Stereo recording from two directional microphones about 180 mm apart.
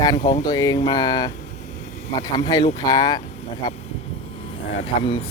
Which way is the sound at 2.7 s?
20° left (ahead or behind).